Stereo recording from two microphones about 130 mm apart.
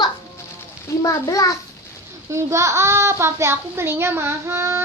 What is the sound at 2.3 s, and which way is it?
A child's voice, 20° right (ahead or behind).